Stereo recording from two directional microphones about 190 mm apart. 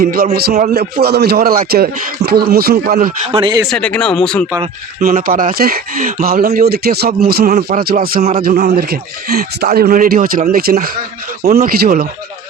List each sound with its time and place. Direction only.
0.0 s speech: 50° right (ahead or behind)
3.3 s speech: 25° right (ahead or behind)
3.7 s speech: 5° left (ahead or behind)
4.9 s speech: 45° right (ahead or behind)